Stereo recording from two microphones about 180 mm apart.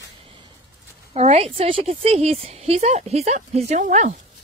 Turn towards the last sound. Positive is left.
turn(degrees=-45)  # may be behind; listen again after turning